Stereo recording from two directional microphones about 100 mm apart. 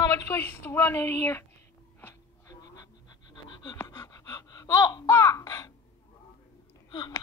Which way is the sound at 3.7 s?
30° left (ahead or behind).